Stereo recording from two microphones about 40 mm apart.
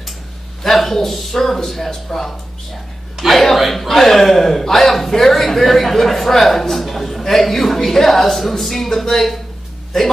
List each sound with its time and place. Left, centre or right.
0.7 s speech: centre